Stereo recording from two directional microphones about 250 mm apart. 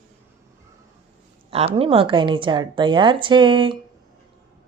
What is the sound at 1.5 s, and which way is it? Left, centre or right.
A woman's voice, right.